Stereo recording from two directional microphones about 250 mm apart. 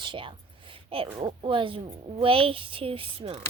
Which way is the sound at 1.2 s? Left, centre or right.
Right.